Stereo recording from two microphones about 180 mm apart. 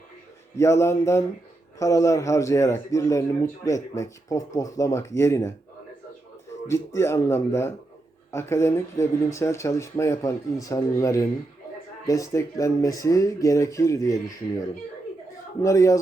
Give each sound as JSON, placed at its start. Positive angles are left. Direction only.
{"t": 0.5, "sound": "a man's voice", "side_deg": 15}
{"t": 6.7, "sound": "a man's voice", "side_deg": 15}
{"t": 15.6, "sound": "a man's voice", "side_deg": 15}